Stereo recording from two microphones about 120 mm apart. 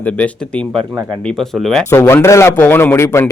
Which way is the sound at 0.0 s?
10° left (ahead or behind).